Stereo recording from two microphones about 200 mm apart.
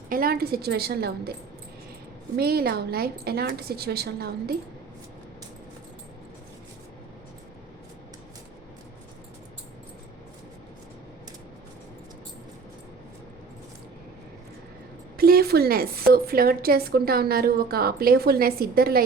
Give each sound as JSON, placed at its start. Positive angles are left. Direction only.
{"t": 0.1, "sound": "a woman's voice", "side_deg": -50}
{"t": 2.3, "sound": "a woman's voice", "side_deg": -50}
{"t": 15.2, "sound": "a woman's voice", "side_deg": -50}